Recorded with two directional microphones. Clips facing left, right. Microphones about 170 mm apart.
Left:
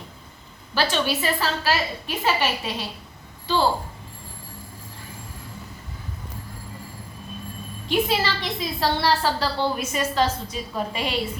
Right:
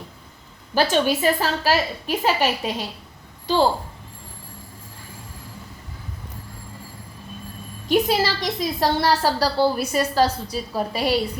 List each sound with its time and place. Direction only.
0.7 s a woman's voice: 45° right (ahead or behind)
7.9 s a woman's voice: 40° right (ahead or behind)